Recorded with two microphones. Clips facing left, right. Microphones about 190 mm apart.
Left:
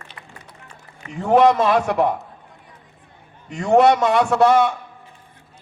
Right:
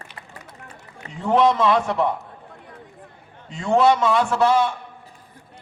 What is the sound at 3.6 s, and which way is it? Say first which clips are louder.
Speech: left 3 dB; 60° left (ahead or behind).